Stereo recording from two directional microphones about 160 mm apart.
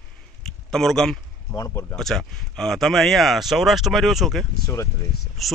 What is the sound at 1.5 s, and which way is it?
Speech, 20° left (ahead or behind).